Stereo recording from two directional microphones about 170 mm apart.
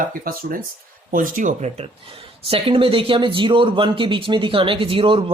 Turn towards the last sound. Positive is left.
turn(degrees=-30)  # may be behind; listen again after turning